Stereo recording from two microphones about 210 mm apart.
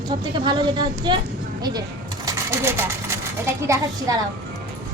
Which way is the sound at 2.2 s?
10° right (ahead or behind).